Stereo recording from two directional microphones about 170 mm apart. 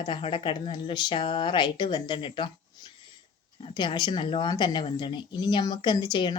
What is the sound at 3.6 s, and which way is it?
Speech, 25° left (ahead or behind).